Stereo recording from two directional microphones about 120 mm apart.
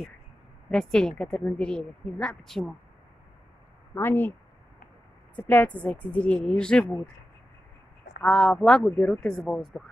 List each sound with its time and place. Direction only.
0.7 s speech: 5° left (ahead or behind)
3.9 s a woman's voice: 15° left (ahead or behind)
8.2 s a woman's voice: 5° left (ahead or behind)
9.3 s speech: centre (ahead or behind)